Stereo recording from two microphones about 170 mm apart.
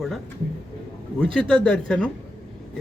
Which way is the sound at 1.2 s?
5° left (ahead or behind).